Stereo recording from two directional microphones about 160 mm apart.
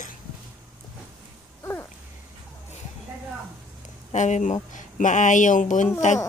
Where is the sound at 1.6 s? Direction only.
15° left (ahead or behind).